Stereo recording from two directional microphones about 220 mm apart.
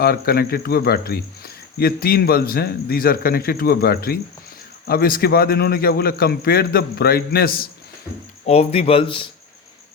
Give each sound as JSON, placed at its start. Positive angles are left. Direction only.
{"t": 0.0, "sound": "a man's voice", "side_deg": 45}
{"t": 8.4, "sound": "speech", "side_deg": 30}